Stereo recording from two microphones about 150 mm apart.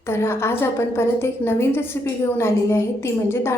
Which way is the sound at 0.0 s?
15° left (ahead or behind).